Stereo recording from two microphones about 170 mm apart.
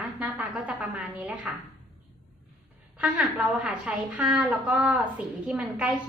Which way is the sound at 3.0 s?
10° right (ahead or behind).